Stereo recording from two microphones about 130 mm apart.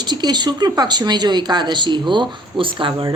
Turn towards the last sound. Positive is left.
turn(degrees=-40)  # may be behind; listen again after turning